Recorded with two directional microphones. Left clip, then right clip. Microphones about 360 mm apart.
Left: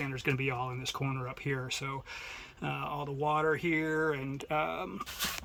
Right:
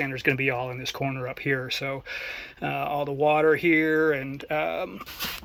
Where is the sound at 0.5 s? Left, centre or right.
Centre.